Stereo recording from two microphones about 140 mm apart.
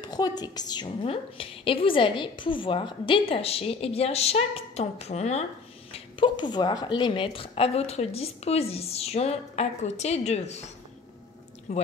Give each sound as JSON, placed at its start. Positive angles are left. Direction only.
{"t": 0.0, "sound": "a woman's voice", "side_deg": 30}
{"t": 1.0, "sound": "a woman's voice", "side_deg": 40}
{"t": 5.9, "sound": "a woman's voice", "side_deg": 35}